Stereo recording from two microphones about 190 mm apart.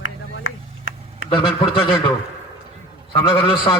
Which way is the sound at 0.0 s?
90° left.